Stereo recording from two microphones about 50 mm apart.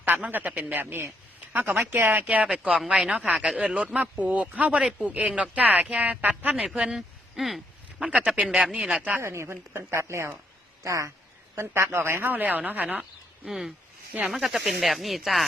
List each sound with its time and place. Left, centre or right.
0.3 s speech: right
0.8 s speech: right
1.5 s speech: right
2.2 s speech: right
3.3 s speech: centre
3.6 s speech: right
6.9 s speech: centre
7.9 s speech: centre
9.2 s a woman's voice: right
10.8 s speech: right
11.5 s speech: right
13.5 s speech: centre